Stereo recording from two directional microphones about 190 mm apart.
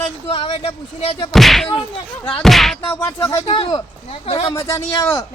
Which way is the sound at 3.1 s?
25° left (ahead or behind).